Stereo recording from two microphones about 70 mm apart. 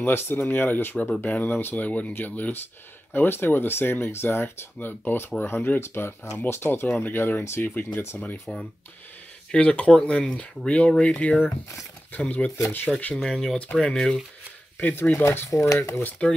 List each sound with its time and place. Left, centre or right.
0.0 s speech: left
8.5 s speech: centre
13.2 s speech: centre
14.8 s speech: left
15.0 s speech: left
16.2 s speech: centre